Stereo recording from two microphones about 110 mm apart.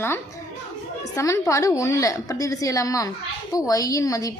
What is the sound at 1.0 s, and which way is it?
A woman's voice, 30° left (ahead or behind).